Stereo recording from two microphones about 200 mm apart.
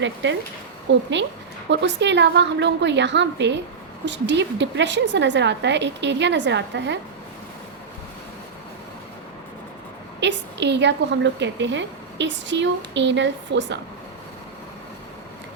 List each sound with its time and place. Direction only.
0.0 s a woman's voice: 65° right (ahead or behind)
10.2 s a woman's voice: 60° right (ahead or behind)